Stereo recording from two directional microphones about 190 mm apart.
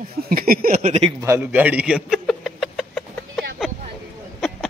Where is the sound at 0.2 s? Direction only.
50° right (ahead or behind).